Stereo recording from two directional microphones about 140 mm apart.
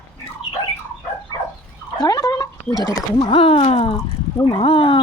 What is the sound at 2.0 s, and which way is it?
Speech, 25° left (ahead or behind).